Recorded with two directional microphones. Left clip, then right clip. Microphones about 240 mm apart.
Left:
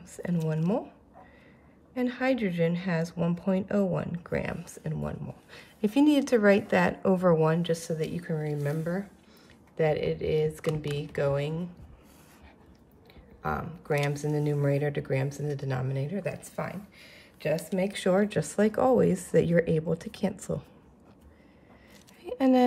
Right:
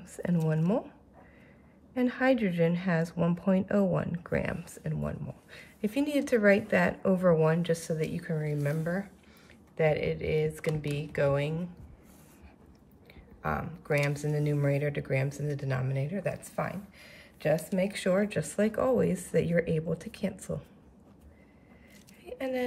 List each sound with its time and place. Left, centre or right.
0.5 s a woman's voice: centre
2.0 s a woman's voice: centre
13.4 s speech: centre
22.2 s a sound: centre